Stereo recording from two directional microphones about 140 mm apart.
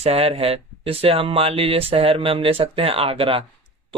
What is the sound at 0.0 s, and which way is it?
Speech, 45° right (ahead or behind).